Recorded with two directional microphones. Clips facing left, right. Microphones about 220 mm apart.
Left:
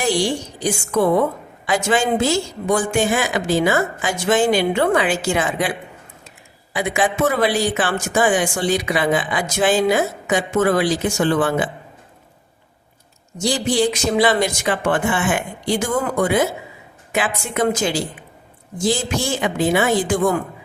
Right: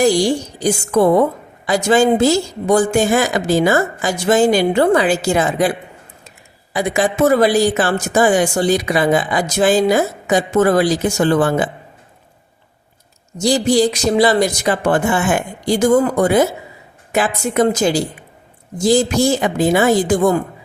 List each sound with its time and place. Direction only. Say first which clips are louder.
0.0 s speech: right 6 dB; 40° right (ahead or behind)
6.7 s speech: right 4 dB; 40° right (ahead or behind)
13.4 s speech: right 5 dB; 40° right (ahead or behind)